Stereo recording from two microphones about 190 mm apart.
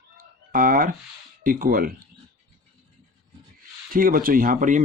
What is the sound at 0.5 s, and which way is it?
Speech, 45° right (ahead or behind).